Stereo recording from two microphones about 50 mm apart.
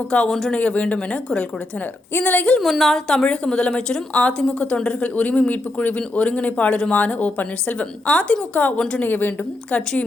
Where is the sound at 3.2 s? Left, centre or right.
Centre.